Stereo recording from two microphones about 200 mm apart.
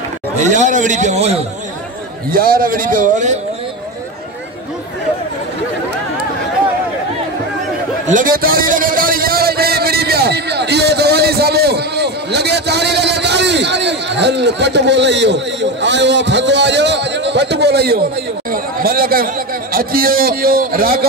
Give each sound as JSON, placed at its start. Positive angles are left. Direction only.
{"t": 0.4, "sound": "a man's voice", "side_deg": -35}
{"t": 2.3, "sound": "a man's voice", "side_deg": -45}
{"t": 8.1, "sound": "a sound", "side_deg": -45}
{"t": 18.5, "sound": "speech", "side_deg": -45}